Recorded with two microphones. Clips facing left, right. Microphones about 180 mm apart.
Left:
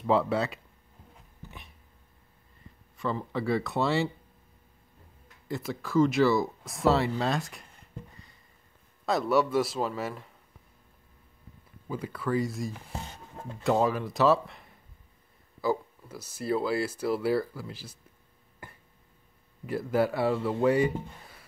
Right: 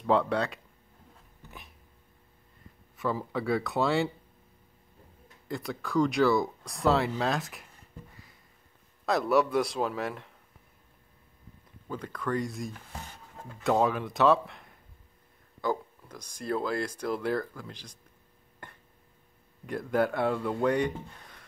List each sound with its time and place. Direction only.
0.0 s speech: 5° left (ahead or behind)
3.0 s speech: 5° right (ahead or behind)
5.5 s speech: centre (ahead or behind)
8.1 s a sound: centre (ahead or behind)
9.0 s speech: centre (ahead or behind)
11.9 s speech: 10° left (ahead or behind)
13.4 s music: 20° left (ahead or behind)
13.7 s speech: centre (ahead or behind)
18.6 s a sound: 10° left (ahead or behind)
19.6 s speech: 5° left (ahead or behind)